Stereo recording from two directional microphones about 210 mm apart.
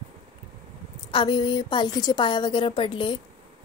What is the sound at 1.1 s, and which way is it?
A woman's voice, 20° left (ahead or behind).